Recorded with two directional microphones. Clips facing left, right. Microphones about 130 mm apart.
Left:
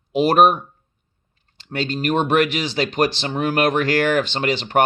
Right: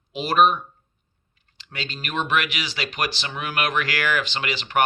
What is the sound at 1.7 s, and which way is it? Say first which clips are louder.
Speech: left 11 dB; 45° left (ahead or behind).